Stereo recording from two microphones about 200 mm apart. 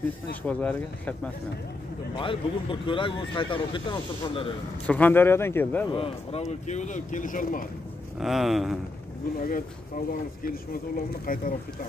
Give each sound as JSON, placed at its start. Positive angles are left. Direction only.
{"t": 0.4, "sound": "speech", "side_deg": 5}
{"t": 2.1, "sound": "speech", "side_deg": 25}
{"t": 4.8, "sound": "speech", "side_deg": 5}
{"t": 5.9, "sound": "speech", "side_deg": 30}
{"t": 8.2, "sound": "speech", "side_deg": 0}
{"t": 9.4, "sound": "speech", "side_deg": 45}